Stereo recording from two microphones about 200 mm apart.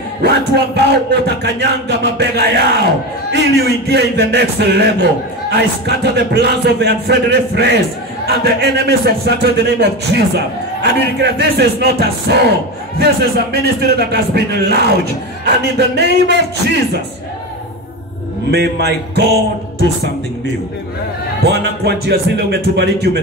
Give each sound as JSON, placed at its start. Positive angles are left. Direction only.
{"t": 0.2, "sound": "a man's voice", "side_deg": -55}
{"t": 18.5, "sound": "a man's voice", "side_deg": -55}
{"t": 21.5, "sound": "a man's voice", "side_deg": -55}